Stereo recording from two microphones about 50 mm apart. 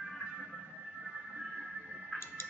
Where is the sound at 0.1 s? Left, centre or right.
Centre.